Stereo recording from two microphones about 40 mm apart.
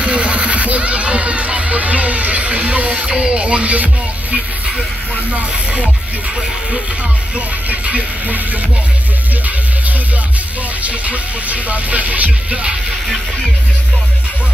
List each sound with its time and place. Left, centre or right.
0.0 s a sound: right
5.3 s speech: right
7.3 s music: right
10.8 s music: right